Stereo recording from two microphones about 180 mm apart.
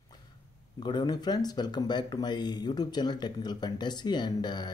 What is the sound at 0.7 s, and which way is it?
Speech, 25° left (ahead or behind).